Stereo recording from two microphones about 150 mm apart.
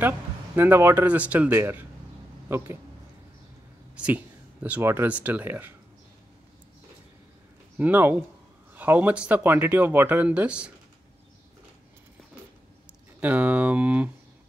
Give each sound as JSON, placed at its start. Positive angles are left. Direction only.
{"t": 0.6, "sound": "speech", "side_deg": -15}
{"t": 3.9, "sound": "speech", "side_deg": -10}
{"t": 7.7, "sound": "speech", "side_deg": -10}
{"t": 13.2, "sound": "speech", "side_deg": -10}